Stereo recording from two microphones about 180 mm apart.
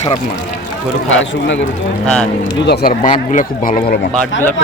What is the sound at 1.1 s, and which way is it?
Speech, 90° left.